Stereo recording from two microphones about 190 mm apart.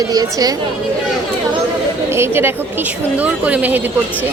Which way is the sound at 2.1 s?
15° right (ahead or behind).